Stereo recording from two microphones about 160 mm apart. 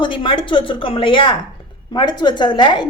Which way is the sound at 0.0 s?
30° left (ahead or behind).